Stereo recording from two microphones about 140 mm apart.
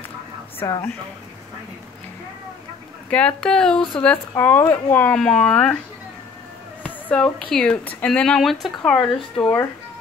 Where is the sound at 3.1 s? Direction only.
10° left (ahead or behind).